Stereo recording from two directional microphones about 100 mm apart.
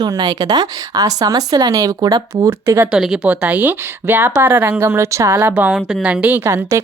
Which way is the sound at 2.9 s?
5° right (ahead or behind).